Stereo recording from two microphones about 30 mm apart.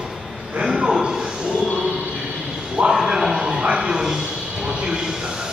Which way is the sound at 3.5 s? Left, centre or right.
Right.